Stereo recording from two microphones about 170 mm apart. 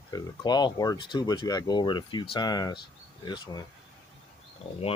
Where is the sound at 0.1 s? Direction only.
25° left (ahead or behind).